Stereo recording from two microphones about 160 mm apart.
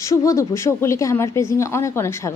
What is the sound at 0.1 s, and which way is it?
A woman's voice, 20° left (ahead or behind).